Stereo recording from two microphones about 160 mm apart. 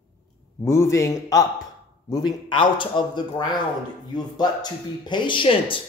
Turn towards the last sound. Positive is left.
turn(degrees=35)  # may be behind; listen again after turning